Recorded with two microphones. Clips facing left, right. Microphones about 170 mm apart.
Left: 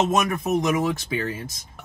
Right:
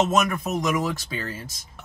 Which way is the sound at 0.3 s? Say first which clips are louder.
Left 3 dB; 20° left (ahead or behind).